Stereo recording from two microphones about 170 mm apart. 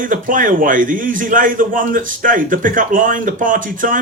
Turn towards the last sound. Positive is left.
turn(degrees=-50)  # may be behind; listen again after turning